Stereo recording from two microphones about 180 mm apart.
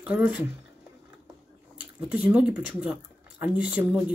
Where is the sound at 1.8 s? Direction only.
10° right (ahead or behind).